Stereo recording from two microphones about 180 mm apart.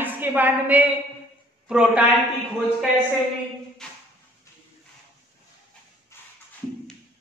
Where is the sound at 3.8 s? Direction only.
5° left (ahead or behind).